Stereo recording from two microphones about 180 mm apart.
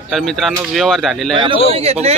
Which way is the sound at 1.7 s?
35° right (ahead or behind).